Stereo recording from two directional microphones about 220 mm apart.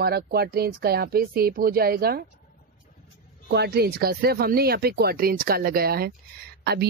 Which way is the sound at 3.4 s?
45° right (ahead or behind).